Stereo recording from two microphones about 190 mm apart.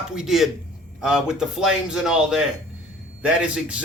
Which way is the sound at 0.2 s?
Centre (ahead or behind).